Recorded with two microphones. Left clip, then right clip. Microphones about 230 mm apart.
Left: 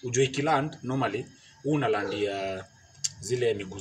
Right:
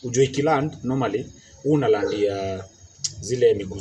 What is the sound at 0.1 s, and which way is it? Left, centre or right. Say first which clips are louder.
Speech: right 5 dB; left.